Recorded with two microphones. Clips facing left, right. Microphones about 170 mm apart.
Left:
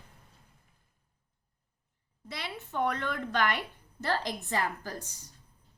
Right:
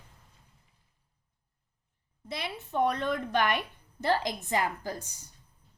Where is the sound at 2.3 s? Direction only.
15° right (ahead or behind).